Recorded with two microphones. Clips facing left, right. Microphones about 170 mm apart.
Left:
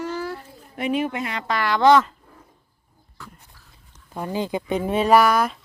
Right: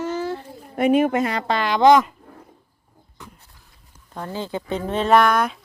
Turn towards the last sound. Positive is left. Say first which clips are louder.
# even
turn(degrees=5)  # may be behind; listen again after turning